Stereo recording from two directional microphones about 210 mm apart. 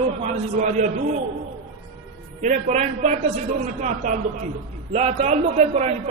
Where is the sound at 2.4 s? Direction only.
35° right (ahead or behind).